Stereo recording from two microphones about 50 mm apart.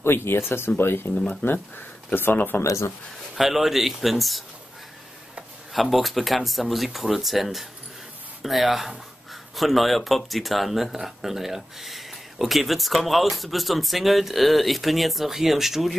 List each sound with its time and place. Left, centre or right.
0.0 s speech: left
2.6 s speech: left
3.3 s speech: centre
5.7 s speech: centre